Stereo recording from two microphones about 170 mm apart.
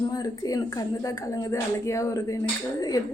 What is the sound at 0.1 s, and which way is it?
A woman's voice, 20° left (ahead or behind).